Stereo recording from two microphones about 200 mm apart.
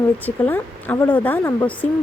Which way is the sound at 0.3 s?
10° left (ahead or behind).